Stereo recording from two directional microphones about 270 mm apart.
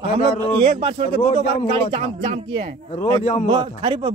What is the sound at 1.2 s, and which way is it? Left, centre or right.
Speech, left.